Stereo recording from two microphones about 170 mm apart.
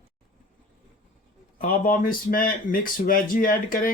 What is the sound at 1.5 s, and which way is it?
Speech, 55° left (ahead or behind).